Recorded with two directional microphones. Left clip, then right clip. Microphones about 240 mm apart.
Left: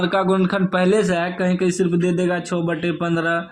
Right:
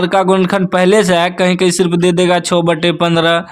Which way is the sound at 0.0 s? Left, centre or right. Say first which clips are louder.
Right 7 dB; right.